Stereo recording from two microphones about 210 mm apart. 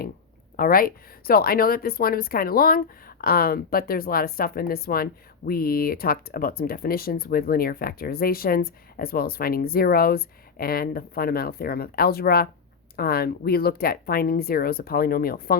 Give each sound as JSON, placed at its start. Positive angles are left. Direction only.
{"t": 0.5, "sound": "speech", "side_deg": 45}